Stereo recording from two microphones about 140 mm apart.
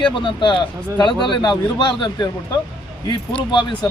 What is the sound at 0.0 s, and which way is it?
Speech, 35° left (ahead or behind).